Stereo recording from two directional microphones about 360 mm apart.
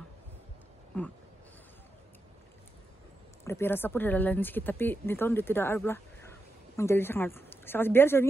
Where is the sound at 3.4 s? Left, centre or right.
Centre.